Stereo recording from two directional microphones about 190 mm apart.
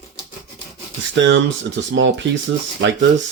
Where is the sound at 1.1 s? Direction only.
70° right (ahead or behind).